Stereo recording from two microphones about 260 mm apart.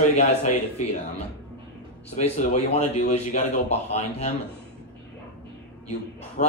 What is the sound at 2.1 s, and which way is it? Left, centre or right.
A man's voice, left.